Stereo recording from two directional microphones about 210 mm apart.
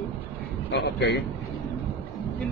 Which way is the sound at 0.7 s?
55° left (ahead or behind).